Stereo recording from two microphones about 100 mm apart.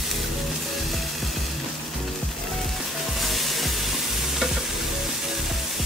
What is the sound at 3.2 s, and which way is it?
Music, centre (ahead or behind).